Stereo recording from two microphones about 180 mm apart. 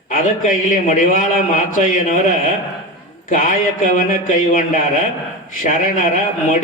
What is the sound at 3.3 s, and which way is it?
A man's voice, 45° left (ahead or behind).